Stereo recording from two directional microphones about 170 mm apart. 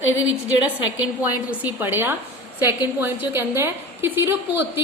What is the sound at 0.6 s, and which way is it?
A woman's voice, 10° right (ahead or behind).